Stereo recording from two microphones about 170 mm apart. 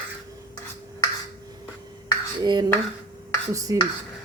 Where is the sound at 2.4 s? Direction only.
25° right (ahead or behind).